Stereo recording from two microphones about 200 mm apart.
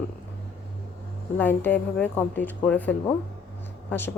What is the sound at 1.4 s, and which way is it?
Speech, 10° left (ahead or behind).